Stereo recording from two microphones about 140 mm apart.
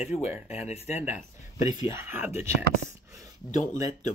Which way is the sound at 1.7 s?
25° right (ahead or behind).